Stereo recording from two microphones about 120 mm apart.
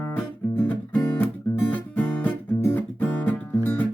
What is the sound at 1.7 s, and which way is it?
Guitar, 15° left (ahead or behind).